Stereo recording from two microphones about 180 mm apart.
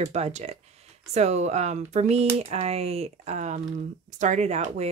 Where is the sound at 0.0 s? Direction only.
40° right (ahead or behind).